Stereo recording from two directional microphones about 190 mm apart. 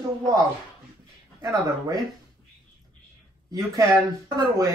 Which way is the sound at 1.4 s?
15° right (ahead or behind).